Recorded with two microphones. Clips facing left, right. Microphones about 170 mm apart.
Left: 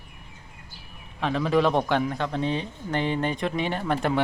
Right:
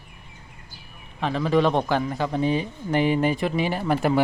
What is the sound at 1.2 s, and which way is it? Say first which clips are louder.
Speech: right 1 dB; centre (ahead or behind).